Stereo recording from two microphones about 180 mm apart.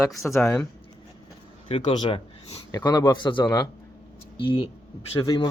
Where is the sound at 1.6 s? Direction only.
30° left (ahead or behind).